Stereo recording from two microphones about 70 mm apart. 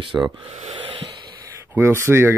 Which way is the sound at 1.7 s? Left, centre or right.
Right.